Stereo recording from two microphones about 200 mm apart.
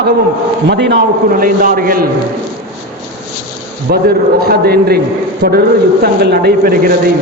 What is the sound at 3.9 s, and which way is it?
A man's voice, 45° right (ahead or behind).